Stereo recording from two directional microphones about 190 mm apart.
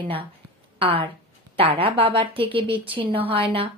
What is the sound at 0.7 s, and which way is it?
A woman's voice, 30° right (ahead or behind).